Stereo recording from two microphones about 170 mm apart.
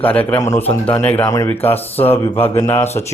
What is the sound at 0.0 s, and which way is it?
Speech, 10° left (ahead or behind).